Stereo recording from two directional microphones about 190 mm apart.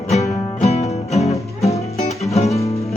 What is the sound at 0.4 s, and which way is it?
Music, 35° left (ahead or behind).